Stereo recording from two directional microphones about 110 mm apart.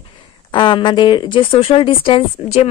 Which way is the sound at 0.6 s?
45° left (ahead or behind).